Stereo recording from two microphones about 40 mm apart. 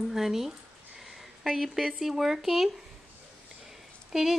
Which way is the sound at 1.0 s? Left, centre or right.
Centre.